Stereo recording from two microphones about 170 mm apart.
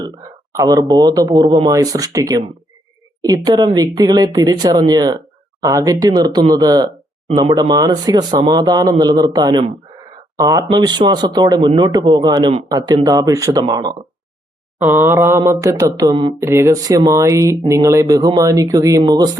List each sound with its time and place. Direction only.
0.5 s speech: 20° right (ahead or behind)
14.8 s a sound: 10° right (ahead or behind)
16.4 s speech: 15° right (ahead or behind)